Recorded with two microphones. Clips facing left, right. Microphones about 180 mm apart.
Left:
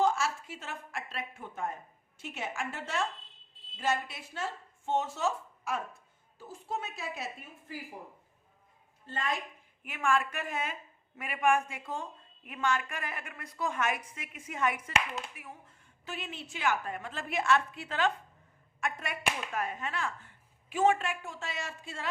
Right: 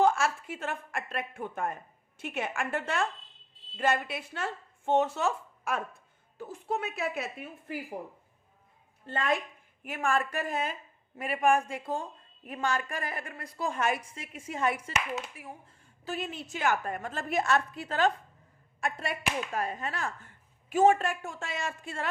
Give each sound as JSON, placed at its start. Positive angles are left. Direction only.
{"t": 0.0, "sound": "a woman's voice", "side_deg": -55}
{"t": 9.0, "sound": "a woman's voice", "side_deg": -60}
{"t": 9.8, "sound": "a woman's voice", "side_deg": -40}